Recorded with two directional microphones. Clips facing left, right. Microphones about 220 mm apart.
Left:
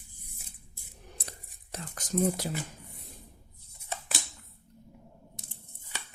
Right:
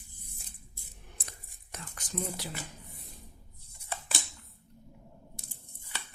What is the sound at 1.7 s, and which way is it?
Whispering, 40° left (ahead or behind).